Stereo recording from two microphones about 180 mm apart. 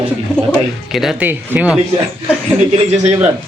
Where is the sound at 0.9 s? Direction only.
5° right (ahead or behind).